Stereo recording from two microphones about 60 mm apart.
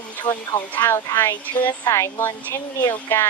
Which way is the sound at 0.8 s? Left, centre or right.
Left.